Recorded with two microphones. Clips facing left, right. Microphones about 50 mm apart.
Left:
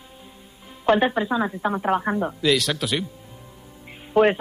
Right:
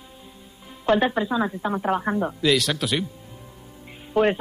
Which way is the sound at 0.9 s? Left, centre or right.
Centre.